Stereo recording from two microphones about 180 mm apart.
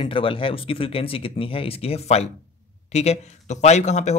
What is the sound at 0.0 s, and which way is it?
Speech, 30° left (ahead or behind).